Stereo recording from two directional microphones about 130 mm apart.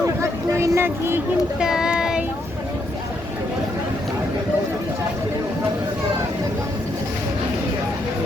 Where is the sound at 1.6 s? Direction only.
5° right (ahead or behind).